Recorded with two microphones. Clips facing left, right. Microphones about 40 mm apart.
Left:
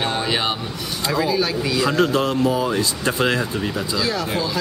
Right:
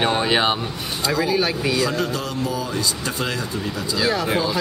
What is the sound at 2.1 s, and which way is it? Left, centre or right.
Speech, left.